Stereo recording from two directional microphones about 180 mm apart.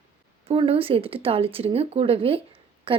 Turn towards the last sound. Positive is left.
turn(degrees=-30)  # may be behind; listen again after turning